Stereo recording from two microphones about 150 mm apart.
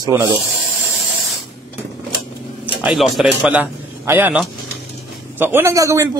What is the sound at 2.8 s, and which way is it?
A man's voice, centre (ahead or behind).